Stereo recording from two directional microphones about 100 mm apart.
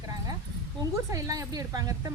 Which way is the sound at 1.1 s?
35° right (ahead or behind).